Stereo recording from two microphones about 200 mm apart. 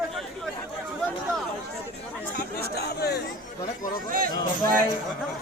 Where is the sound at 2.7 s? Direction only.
55° left (ahead or behind).